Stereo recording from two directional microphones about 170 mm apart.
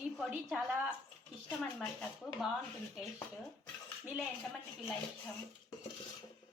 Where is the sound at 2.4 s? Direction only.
Centre (ahead or behind).